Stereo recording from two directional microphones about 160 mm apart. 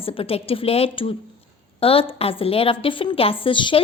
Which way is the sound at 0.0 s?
35° left (ahead or behind).